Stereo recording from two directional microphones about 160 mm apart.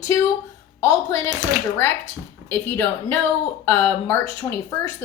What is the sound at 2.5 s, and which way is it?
A woman's voice, 15° left (ahead or behind).